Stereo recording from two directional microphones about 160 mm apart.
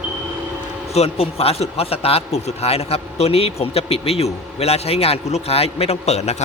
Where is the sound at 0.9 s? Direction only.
40° left (ahead or behind).